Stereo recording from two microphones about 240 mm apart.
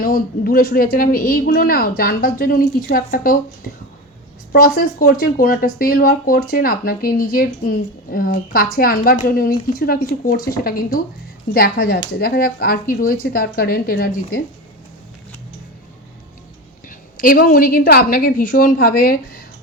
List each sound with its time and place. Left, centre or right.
0.0 s speech: left
16.9 s speech: left